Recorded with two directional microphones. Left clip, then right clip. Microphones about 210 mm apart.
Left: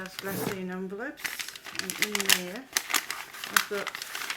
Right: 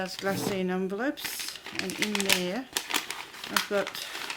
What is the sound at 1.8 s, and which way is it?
Speech, 5° right (ahead or behind).